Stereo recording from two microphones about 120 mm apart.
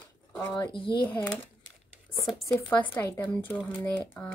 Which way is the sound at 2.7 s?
15° left (ahead or behind).